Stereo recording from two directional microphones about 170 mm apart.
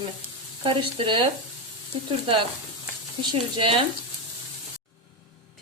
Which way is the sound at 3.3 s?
30° right (ahead or behind).